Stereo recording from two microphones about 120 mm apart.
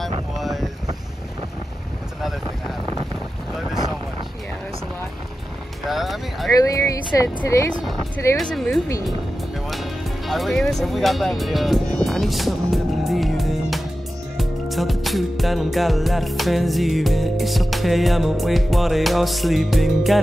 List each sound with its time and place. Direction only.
0.4 s boat: centre (ahead or behind)
5.9 s music: centre (ahead or behind)
6.5 s speech: 30° left (ahead or behind)
8.4 s music: 5° left (ahead or behind)
10.2 s music: centre (ahead or behind)